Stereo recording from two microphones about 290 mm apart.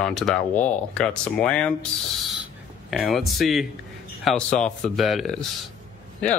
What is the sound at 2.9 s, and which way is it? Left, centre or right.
Speech, centre.